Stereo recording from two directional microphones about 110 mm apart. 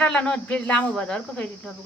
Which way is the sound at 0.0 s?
10° left (ahead or behind).